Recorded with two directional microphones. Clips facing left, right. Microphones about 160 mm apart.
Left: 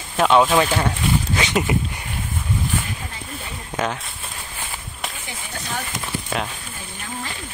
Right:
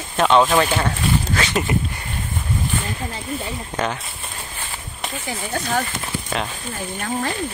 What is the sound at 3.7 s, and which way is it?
Speech, centre (ahead or behind).